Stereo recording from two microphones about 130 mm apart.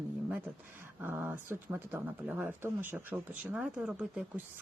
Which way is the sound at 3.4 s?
5° right (ahead or behind).